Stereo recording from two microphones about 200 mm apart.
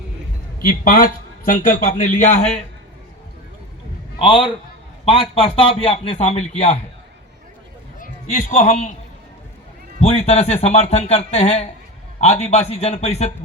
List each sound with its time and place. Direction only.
0.6 s a man's voice: 45° left (ahead or behind)
4.2 s a man's voice: 25° left (ahead or behind)
7.9 s a man's voice: 40° left (ahead or behind)
10.0 s a man's voice: 30° left (ahead or behind)